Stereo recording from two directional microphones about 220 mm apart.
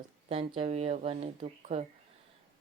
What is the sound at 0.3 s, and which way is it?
Speech, 25° right (ahead or behind).